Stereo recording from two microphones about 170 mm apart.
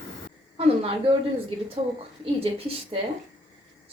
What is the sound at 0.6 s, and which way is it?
Speech, 35° right (ahead or behind).